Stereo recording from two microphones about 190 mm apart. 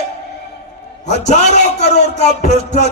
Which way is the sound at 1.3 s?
35° left (ahead or behind).